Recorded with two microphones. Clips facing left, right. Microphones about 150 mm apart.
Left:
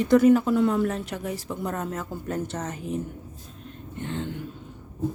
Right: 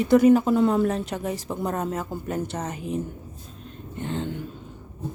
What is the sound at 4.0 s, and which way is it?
Vehicle, 35° right (ahead or behind).